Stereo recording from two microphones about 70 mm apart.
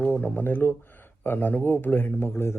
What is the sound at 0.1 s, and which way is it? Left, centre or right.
Speech, left.